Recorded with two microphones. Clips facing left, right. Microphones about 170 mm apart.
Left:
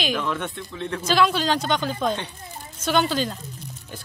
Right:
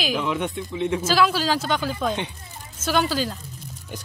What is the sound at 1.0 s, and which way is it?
Speech, 5° right (ahead or behind).